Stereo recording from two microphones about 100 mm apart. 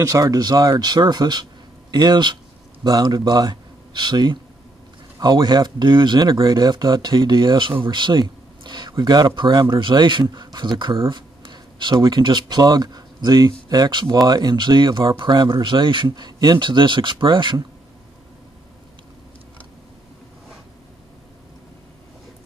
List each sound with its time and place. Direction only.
0.0 s speech: 35° right (ahead or behind); by 17.6 s 55° right (ahead or behind)